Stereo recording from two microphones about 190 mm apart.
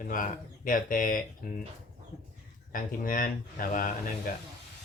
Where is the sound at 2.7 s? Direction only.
45° left (ahead or behind).